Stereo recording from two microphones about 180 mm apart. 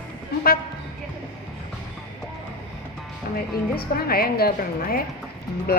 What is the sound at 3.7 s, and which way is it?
Speech, 60° left (ahead or behind).